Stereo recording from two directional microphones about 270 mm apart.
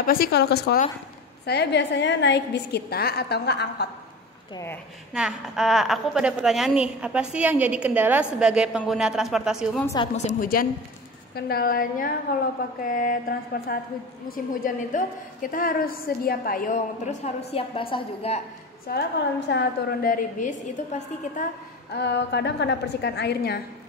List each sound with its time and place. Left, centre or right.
0.0 s a woman's voice: left
5.1 s a woman's voice: centre
10.1 s a woman's voice: left
18.9 s a woman's voice: left
21.9 s a woman's voice: left